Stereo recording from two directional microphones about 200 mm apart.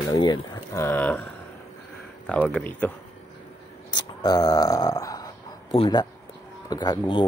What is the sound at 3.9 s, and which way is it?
Speech, 20° left (ahead or behind).